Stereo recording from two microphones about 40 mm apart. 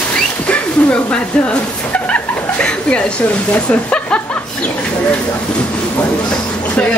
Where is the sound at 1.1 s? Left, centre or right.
Left.